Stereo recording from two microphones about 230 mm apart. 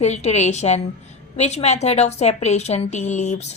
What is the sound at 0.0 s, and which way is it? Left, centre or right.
A woman's voice, left.